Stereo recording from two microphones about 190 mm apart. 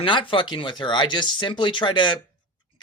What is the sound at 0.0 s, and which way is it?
Speech, 25° left (ahead or behind).